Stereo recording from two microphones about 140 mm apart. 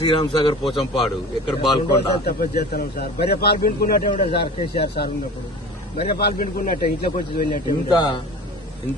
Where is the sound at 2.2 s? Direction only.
90° left.